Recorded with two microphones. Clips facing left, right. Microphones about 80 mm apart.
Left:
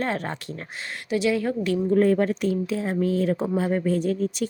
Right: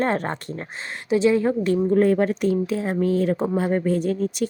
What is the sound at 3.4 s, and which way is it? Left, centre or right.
Speech, right.